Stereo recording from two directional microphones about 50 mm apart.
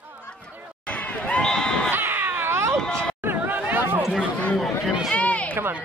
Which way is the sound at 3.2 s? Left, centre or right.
Right.